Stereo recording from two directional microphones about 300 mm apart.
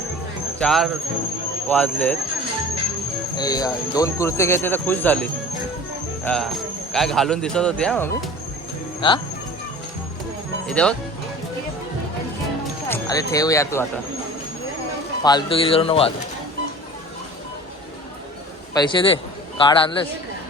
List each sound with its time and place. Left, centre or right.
0.6 s speech: centre
3.3 s speech: centre
9.0 s speech: centre
10.7 s speech: centre
12.9 s speech: centre
15.2 s speech: centre
18.7 s speech: centre